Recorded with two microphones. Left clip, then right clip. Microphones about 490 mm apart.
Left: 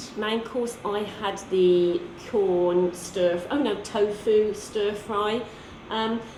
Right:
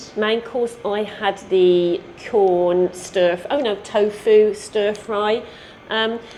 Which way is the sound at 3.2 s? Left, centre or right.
Right.